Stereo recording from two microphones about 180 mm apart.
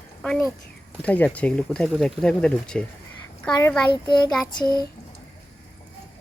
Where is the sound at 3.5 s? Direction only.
20° left (ahead or behind).